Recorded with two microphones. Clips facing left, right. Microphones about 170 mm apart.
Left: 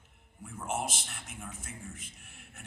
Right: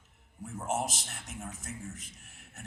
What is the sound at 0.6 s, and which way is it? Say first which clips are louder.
A man's voice: right 2 dB; 40° right (ahead or behind).